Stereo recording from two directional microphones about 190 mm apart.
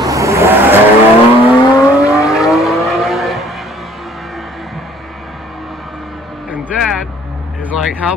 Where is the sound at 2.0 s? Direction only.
15° left (ahead or behind).